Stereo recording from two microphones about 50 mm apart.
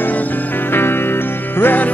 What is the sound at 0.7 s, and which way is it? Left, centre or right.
Music, left.